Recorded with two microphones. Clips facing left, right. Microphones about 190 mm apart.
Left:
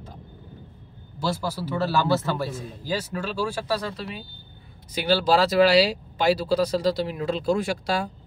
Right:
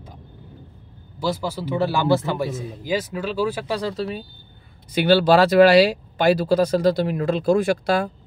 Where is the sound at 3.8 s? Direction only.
35° right (ahead or behind).